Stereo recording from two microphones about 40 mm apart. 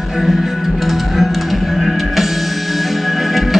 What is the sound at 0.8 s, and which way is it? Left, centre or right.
Music, centre.